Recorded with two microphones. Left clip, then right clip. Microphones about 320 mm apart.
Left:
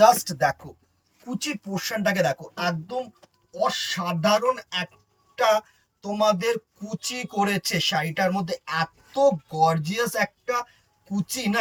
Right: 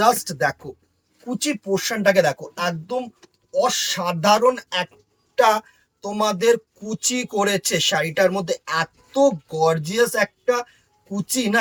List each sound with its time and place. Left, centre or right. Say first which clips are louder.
0.0 s speech: left 1 dB; centre